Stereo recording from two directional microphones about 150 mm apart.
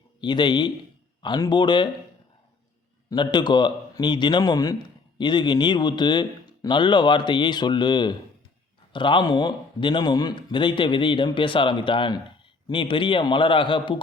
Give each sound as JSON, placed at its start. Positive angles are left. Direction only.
{"t": 0.2, "sound": "a man's voice", "side_deg": 30}
{"t": 3.1, "sound": "a man's voice", "side_deg": 30}